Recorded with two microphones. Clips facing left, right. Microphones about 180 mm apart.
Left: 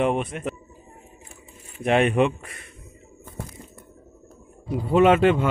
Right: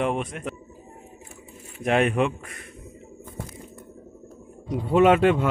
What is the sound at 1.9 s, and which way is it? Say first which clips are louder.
Speech: left 2 dB; centre (ahead or behind).